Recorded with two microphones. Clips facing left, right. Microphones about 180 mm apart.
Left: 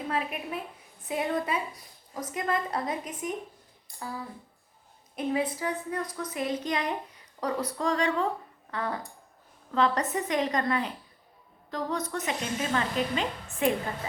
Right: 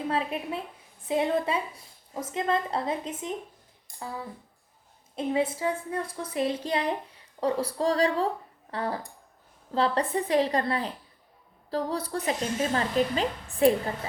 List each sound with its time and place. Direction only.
0.1 s a woman's voice: 30° right (ahead or behind)
5.1 s a woman's voice: 25° right (ahead or behind)